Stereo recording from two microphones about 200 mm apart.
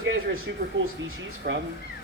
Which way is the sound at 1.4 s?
50° right (ahead or behind).